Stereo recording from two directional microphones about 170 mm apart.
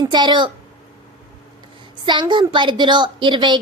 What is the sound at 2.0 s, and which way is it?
A child's voice, 25° right (ahead or behind).